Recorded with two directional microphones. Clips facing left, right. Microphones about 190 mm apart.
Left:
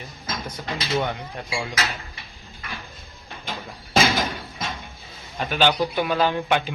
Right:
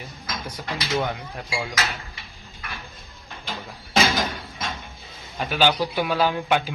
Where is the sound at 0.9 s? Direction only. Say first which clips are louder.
Left 1 dB; centre (ahead or behind).